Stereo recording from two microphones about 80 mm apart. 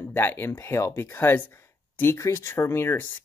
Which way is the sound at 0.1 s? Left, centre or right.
Left.